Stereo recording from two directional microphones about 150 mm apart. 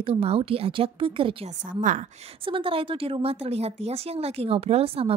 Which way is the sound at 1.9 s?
60° right (ahead or behind).